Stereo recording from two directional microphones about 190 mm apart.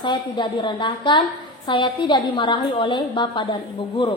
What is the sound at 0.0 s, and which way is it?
A woman's voice, 25° left (ahead or behind).